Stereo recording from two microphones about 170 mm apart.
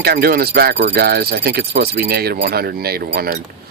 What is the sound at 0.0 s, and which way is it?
Speech, 65° right (ahead or behind).